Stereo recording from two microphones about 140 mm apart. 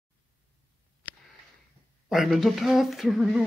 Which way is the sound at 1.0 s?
10° left (ahead or behind).